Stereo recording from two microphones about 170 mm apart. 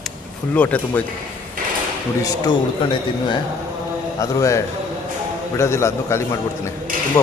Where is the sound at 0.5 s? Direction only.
10° left (ahead or behind).